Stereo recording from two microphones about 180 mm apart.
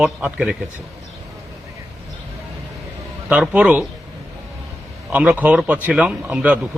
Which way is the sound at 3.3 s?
5° right (ahead or behind).